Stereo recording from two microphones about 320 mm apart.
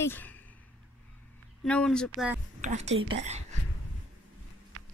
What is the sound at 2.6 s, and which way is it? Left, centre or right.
Speech, right.